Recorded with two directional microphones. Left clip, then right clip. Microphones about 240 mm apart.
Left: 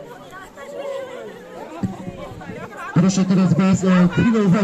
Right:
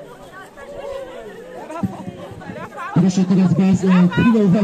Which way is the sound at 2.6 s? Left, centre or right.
Right.